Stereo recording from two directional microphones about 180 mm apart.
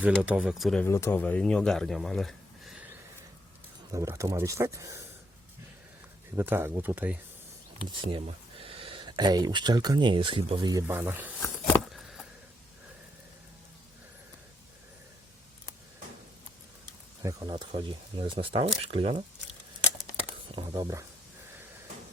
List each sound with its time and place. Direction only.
0.0 s speech: 5° right (ahead or behind)
0.9 s speech: 15° left (ahead or behind)
3.9 s speech: 15° right (ahead or behind)
6.3 s speech: 10° right (ahead or behind)
8.1 s speech: 30° right (ahead or behind); by 11.3 s 10° right (ahead or behind)
11.9 s a sound: centre (ahead or behind)
17.2 s speech: 25° right (ahead or behind)
20.5 s speech: 25° right (ahead or behind)